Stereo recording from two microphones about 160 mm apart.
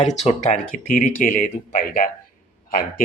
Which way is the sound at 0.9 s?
55° left (ahead or behind).